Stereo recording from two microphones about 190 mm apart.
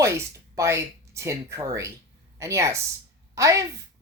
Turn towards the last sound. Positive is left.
turn(degrees=-15)  # may be behind; listen again after turning